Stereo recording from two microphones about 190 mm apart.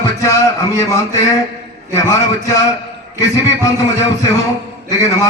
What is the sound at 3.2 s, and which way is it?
A man's voice, 15° left (ahead or behind).